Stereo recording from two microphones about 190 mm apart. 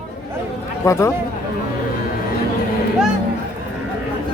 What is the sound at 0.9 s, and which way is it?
Speech, 15° left (ahead or behind).